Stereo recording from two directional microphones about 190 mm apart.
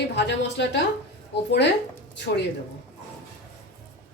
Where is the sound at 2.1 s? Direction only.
65° left (ahead or behind).